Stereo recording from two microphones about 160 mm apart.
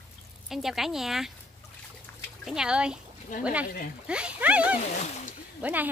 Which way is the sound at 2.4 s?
5° right (ahead or behind).